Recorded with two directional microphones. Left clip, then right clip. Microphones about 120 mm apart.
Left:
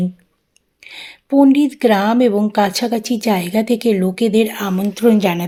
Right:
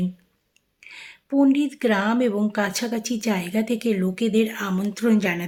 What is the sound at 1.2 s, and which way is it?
A woman's voice, 30° left (ahead or behind).